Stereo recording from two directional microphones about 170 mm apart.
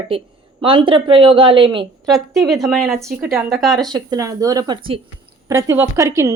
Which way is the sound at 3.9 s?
20° right (ahead or behind).